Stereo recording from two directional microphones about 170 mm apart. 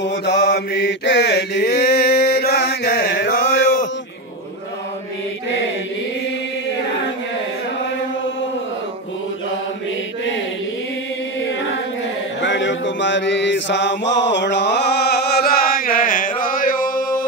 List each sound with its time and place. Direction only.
0.0 s mantra: 80° left
12.4 s mantra: 90° left; by 17.3 s 55° left (ahead or behind)